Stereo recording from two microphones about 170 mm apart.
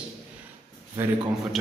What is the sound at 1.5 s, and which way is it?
Speech, centre (ahead or behind).